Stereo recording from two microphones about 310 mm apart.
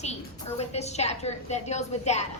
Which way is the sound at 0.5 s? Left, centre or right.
Left.